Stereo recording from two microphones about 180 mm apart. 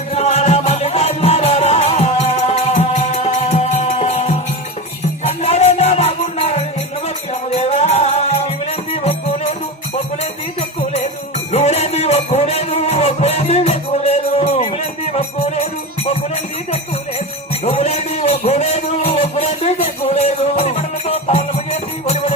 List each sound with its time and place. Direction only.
0.1 s music: 40° left (ahead or behind)
10.6 s music: 40° left (ahead or behind)
17.6 s a sound: 35° left (ahead or behind)